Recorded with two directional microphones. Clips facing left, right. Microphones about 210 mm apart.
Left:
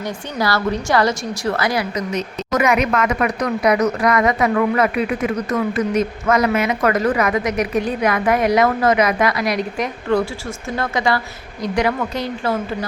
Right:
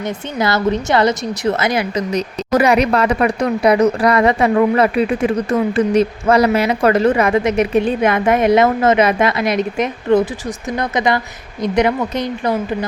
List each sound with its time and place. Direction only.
0.0 s speech: 20° right (ahead or behind)
2.1 s speech: 30° right (ahead or behind)